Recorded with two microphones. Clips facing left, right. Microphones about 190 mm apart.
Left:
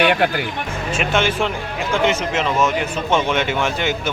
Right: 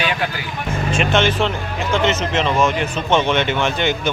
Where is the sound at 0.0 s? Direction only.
60° left (ahead or behind).